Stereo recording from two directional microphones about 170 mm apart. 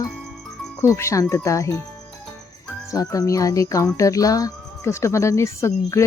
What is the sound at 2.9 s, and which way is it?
Speech, 20° left (ahead or behind).